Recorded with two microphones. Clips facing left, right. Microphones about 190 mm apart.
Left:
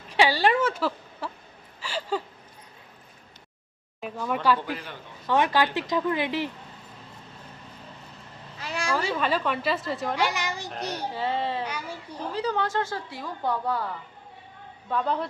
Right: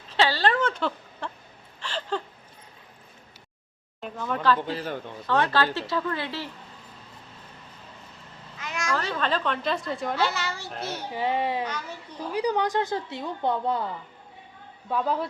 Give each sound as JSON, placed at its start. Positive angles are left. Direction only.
{"t": 0.1, "sound": "speech", "side_deg": 15}
{"t": 1.8, "sound": "a sound", "side_deg": 10}
{"t": 4.0, "sound": "a woman's voice", "side_deg": 10}
{"t": 4.6, "sound": "a man's voice", "side_deg": -35}
{"t": 5.3, "sound": "a woman's voice", "side_deg": 15}
{"t": 8.5, "sound": "a sound", "side_deg": 35}
{"t": 8.9, "sound": "a woman's voice", "side_deg": 10}
{"t": 10.2, "sound": "a woman's voice", "side_deg": 15}
{"t": 11.1, "sound": "speech", "side_deg": -15}
{"t": 11.6, "sound": "a woman's voice", "side_deg": 10}
{"t": 12.3, "sound": "a woman's voice", "side_deg": -15}
{"t": 14.8, "sound": "a woman's voice", "side_deg": -5}